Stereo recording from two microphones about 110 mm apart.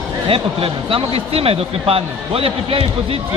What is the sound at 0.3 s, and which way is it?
Speech, 60° right (ahead or behind).